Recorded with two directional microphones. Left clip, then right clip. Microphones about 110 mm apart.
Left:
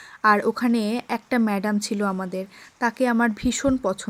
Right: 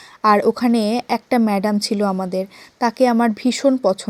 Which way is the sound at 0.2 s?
25° right (ahead or behind).